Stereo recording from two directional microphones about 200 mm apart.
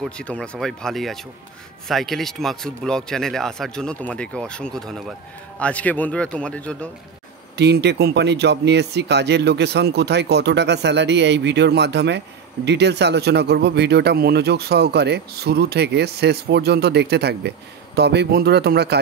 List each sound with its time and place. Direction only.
0.0 s a man's voice: 5° left (ahead or behind)
7.5 s speech: 55° right (ahead or behind)